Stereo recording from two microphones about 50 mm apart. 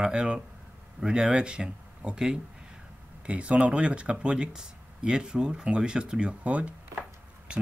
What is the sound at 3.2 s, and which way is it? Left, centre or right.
Speech, right.